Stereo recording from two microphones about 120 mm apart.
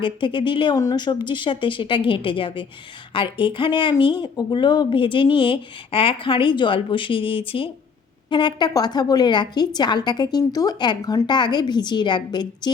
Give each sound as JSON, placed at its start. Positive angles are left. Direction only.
{"t": 0.0, "sound": "a woman's voice", "side_deg": 45}